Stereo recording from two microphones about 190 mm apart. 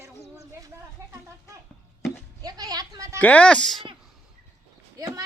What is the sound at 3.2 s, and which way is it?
Speech, 5° left (ahead or behind).